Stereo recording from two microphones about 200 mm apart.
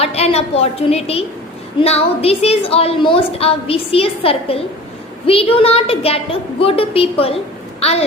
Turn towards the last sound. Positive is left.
turn(degrees=30)  # may be behind; listen again after turning